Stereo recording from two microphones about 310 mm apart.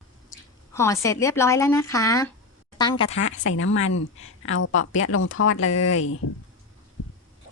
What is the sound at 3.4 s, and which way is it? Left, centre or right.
Speech, left.